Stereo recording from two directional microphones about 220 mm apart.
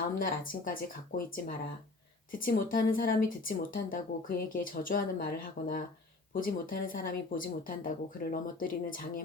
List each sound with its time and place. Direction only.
0.2 s speech: 40° left (ahead or behind)